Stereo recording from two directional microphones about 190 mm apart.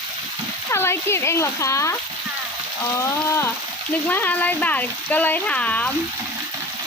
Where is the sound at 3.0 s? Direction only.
15° left (ahead or behind).